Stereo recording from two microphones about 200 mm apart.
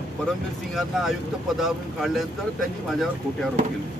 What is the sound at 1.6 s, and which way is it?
Speech, centre (ahead or behind).